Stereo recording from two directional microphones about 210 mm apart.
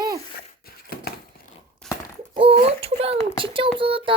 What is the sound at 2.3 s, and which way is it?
A child's voice, 25° right (ahead or behind).